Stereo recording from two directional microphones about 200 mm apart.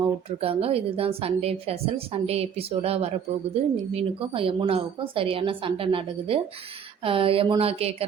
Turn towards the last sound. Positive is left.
turn(degrees=-30)  # may be behind; listen again after turning